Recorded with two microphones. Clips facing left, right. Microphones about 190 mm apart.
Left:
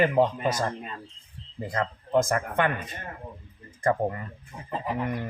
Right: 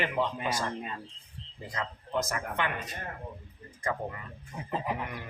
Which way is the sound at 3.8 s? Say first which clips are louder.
Left 9 dB; 50° left (ahead or behind).